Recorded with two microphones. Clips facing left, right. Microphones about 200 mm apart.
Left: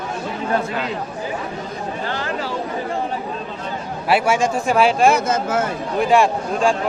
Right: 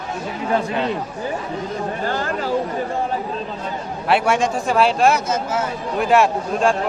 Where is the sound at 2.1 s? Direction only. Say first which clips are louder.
Right 1 dB; 45° right (ahead or behind).